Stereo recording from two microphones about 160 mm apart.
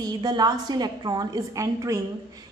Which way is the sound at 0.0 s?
25° right (ahead or behind).